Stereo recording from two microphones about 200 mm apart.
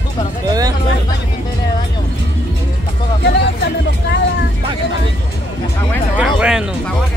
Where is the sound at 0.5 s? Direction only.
20° right (ahead or behind).